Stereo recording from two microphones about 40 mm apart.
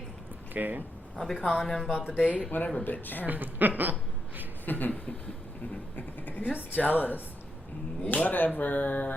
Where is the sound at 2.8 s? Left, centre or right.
Left.